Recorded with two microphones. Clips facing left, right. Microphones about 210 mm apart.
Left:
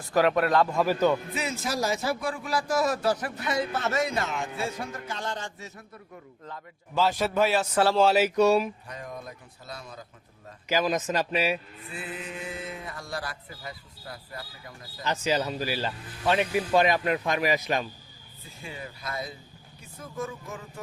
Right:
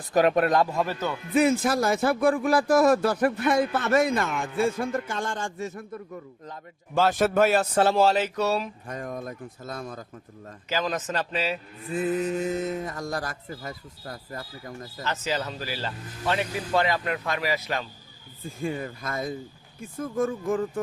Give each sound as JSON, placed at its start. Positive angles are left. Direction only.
{"t": 0.0, "sound": "a man's voice", "side_deg": -20}
{"t": 0.8, "sound": "speech", "side_deg": 10}
{"t": 1.3, "sound": "a man's voice", "side_deg": -55}
{"t": 6.9, "sound": "a man's voice", "side_deg": -50}
{"t": 8.1, "sound": "speech", "side_deg": 10}
{"t": 8.9, "sound": "a man's voice", "side_deg": -50}
{"t": 10.7, "sound": "speech", "side_deg": 10}
{"t": 11.9, "sound": "a man's voice", "side_deg": -45}
{"t": 15.0, "sound": "speech", "side_deg": 15}
{"t": 18.4, "sound": "a man's voice", "side_deg": -50}